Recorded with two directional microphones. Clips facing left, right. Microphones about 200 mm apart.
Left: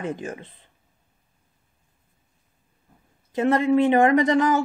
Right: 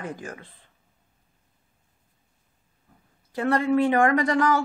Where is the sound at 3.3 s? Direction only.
20° left (ahead or behind).